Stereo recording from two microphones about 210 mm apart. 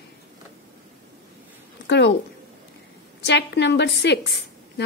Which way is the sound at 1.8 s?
55° left (ahead or behind).